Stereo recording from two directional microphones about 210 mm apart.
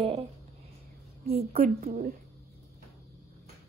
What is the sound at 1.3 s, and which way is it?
Speech, 30° right (ahead or behind).